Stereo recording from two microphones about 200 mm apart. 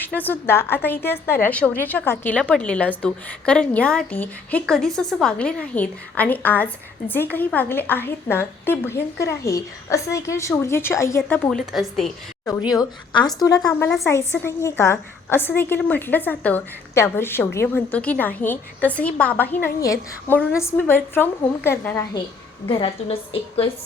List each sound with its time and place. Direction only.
0.0 s a woman's voice: 10° left (ahead or behind)
12.5 s a woman's voice: 20° left (ahead or behind)
22.7 s a woman's voice: 25° left (ahead or behind)